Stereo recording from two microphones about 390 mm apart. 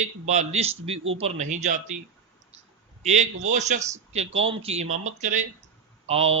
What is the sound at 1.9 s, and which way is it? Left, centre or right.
Speech, centre.